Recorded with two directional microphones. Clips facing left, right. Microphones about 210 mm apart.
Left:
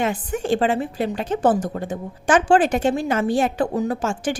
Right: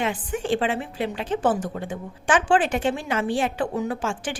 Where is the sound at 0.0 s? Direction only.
40° left (ahead or behind).